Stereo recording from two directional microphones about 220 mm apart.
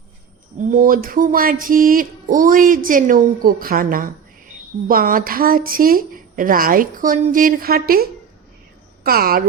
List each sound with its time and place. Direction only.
0.7 s speech: 40° right (ahead or behind)
9.0 s speech: 45° right (ahead or behind)